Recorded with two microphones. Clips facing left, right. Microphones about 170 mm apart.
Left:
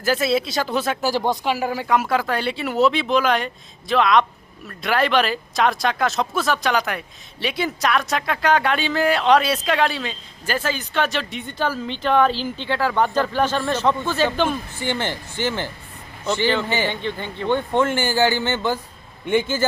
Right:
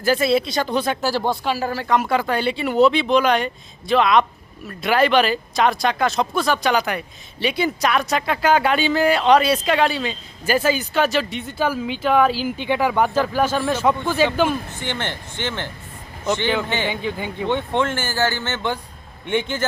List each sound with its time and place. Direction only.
0.0 s speech: centre (ahead or behind)
1.0 s speech: 15° left (ahead or behind); by 14.6 s 5° right (ahead or behind)
14.7 s speech: 10° left (ahead or behind)
16.9 s speech: 10° right (ahead or behind)
17.8 s speech: 15° left (ahead or behind)